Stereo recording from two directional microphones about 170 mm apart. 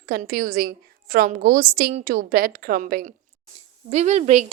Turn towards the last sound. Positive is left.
turn(degrees=-40)  # may be behind; listen again after turning